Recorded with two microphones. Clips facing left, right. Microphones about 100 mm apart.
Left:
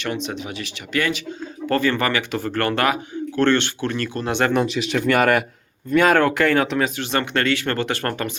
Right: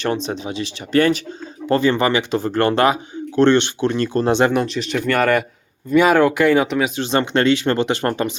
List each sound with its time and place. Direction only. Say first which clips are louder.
0.0 s speech: right 5 dB; 35° right (ahead or behind)
1.6 s speech: right 4 dB; 20° right (ahead or behind)
4.6 s speech: even; 5° left (ahead or behind)
5.9 s speech: right 3 dB; 10° right (ahead or behind)
6.9 s speech: right 4 dB; 25° right (ahead or behind)